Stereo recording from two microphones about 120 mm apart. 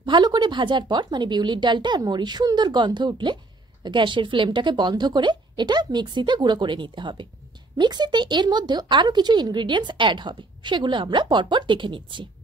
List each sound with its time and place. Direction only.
0.0 s speech: 40° right (ahead or behind)